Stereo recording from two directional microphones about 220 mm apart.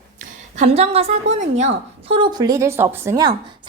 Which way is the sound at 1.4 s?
30° right (ahead or behind).